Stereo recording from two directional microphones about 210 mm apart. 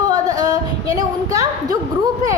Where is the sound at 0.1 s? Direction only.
15° right (ahead or behind).